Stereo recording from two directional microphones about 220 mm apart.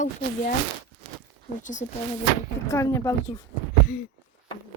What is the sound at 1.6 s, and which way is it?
Speech, 35° left (ahead or behind).